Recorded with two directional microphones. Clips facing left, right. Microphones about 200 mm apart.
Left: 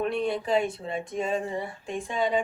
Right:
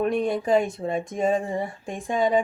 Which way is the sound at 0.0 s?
45° right (ahead or behind).